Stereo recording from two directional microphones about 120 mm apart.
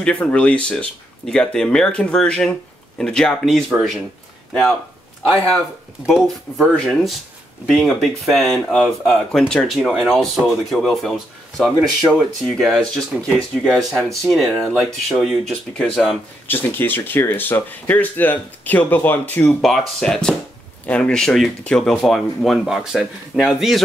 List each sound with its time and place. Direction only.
0.0 s speech: 10° left (ahead or behind)
6.0 s speech: centre (ahead or behind)
16.4 s speech: 15° left (ahead or behind); by 23.8 s 5° right (ahead or behind)